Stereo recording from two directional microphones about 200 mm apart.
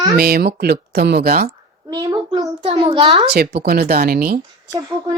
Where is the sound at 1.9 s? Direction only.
20° right (ahead or behind).